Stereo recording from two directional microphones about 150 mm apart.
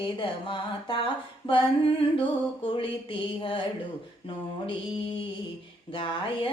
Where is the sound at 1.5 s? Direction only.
35° left (ahead or behind).